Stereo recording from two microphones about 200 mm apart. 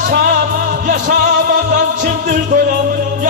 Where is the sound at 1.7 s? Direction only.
40° right (ahead or behind).